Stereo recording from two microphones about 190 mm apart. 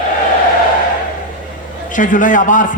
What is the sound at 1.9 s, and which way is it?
Speech, 45° left (ahead or behind).